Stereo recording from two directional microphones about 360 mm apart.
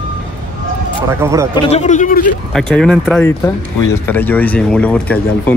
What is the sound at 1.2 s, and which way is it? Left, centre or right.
Speech, centre.